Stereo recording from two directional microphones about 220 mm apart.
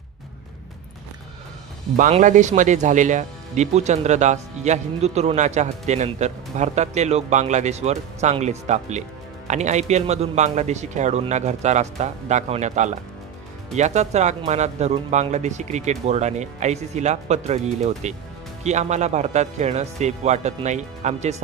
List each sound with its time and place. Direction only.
2.0 s speech: 35° right (ahead or behind)